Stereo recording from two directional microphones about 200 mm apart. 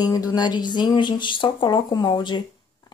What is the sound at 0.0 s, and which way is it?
Speech, 20° left (ahead or behind).